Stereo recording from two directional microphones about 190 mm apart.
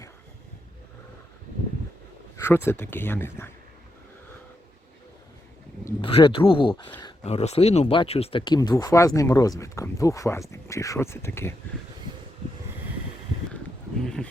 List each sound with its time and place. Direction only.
2.3 s speech: 15° left (ahead or behind)
6.0 s speech: 30° left (ahead or behind); by 11.5 s 10° left (ahead or behind)
14.0 s a sound: 5° left (ahead or behind)